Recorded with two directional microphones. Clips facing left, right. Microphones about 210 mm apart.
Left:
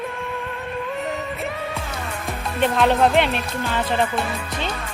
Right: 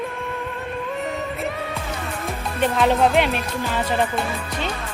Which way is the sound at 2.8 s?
Centre (ahead or behind).